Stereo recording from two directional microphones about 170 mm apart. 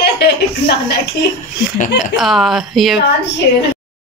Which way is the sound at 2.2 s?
Centre (ahead or behind).